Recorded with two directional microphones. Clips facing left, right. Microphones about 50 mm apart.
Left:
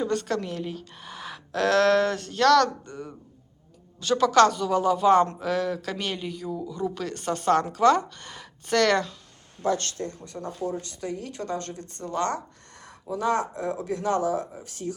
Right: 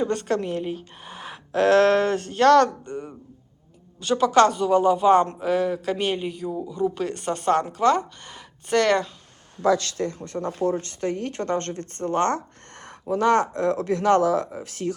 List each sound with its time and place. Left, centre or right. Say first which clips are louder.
0.1 s a woman's voice: right 3 dB; right
9.9 s speech: right 6 dB; right
10.2 s speech: right 6 dB; right